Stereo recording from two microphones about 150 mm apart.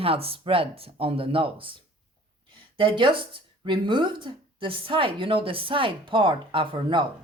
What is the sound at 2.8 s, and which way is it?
Speech, 35° right (ahead or behind).